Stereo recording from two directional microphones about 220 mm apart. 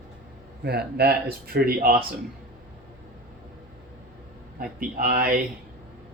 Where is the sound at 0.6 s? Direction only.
45° right (ahead or behind).